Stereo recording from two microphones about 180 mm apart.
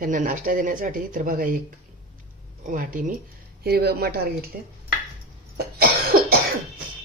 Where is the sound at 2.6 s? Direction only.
50° right (ahead or behind).